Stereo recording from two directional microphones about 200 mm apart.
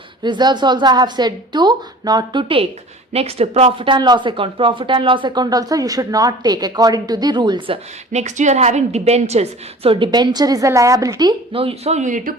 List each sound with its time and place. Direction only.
0.2 s speech: 20° right (ahead or behind)
8.1 s a woman's voice: 35° right (ahead or behind)